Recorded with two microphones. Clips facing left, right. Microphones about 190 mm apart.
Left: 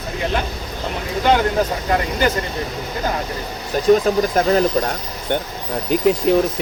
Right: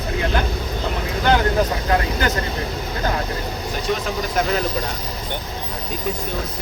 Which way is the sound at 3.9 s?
40° left (ahead or behind).